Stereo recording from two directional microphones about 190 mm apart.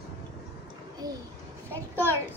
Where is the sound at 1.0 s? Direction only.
20° right (ahead or behind).